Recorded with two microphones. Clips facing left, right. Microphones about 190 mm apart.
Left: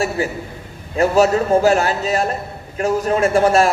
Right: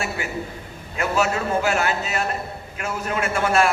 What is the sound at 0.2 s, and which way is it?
A man's voice, 35° left (ahead or behind).